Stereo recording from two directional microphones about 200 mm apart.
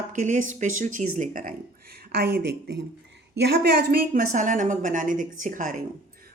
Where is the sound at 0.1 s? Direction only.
40° right (ahead or behind).